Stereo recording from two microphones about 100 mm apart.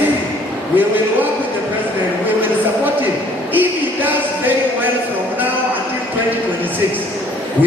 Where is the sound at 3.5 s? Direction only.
20° right (ahead or behind).